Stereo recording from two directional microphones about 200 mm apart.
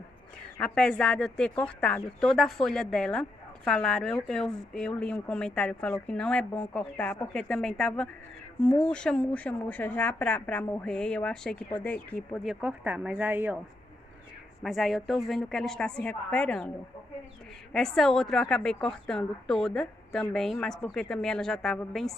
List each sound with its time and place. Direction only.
0.6 s speech: 5° left (ahead or behind)
12.4 s speech: 5° right (ahead or behind)
14.6 s speech: centre (ahead or behind)
17.7 s speech: centre (ahead or behind)